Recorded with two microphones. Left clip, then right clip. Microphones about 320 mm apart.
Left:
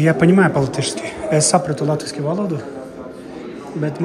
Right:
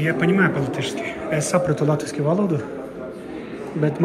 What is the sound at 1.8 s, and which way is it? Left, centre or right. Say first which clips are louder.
Speech: left 1 dB; centre.